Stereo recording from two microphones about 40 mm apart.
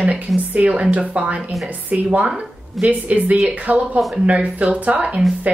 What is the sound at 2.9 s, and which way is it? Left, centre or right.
A woman's voice, right.